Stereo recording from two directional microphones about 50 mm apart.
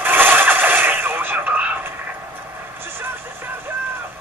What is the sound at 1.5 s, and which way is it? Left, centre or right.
Radio, right.